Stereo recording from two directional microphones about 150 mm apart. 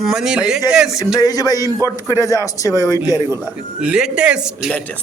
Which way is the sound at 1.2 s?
25° left (ahead or behind).